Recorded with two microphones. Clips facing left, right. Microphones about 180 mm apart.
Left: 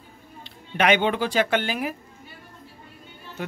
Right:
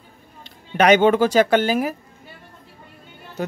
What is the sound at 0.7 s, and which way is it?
Speech, 40° right (ahead or behind).